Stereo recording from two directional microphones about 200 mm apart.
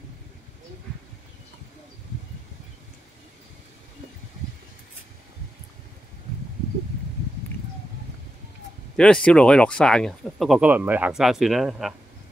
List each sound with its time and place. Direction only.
8.9 s speech: 5° left (ahead or behind)